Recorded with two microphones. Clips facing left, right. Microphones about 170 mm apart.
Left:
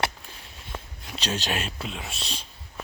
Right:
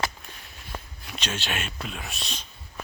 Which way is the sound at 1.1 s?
35° left (ahead or behind).